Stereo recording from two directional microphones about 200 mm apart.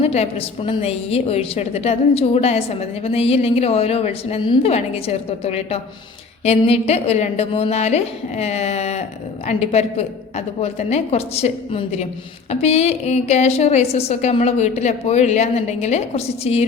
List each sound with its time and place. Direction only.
0.0 s a woman's voice: 30° left (ahead or behind)